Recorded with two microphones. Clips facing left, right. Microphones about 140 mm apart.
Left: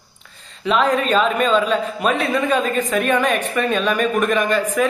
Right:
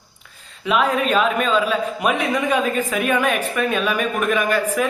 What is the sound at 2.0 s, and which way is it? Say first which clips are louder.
A man's voice: left 2 dB; 15° right (ahead or behind).